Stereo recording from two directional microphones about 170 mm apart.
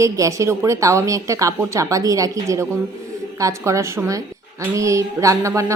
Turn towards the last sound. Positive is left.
turn(degrees=-20)  # may be behind; listen again after turning